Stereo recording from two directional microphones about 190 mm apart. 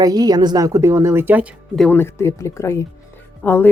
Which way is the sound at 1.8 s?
10° left (ahead or behind).